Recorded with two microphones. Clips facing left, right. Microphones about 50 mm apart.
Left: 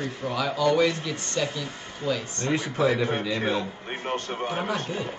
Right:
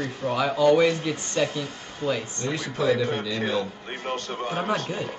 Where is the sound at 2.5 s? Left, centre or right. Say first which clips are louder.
Left 1 dB; left.